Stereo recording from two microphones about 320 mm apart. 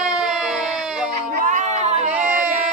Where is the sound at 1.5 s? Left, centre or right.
Right.